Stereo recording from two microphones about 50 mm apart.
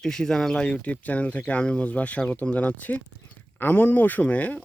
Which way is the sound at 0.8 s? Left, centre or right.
Left.